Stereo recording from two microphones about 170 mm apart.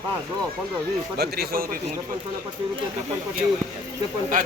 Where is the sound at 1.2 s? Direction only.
65° right (ahead or behind).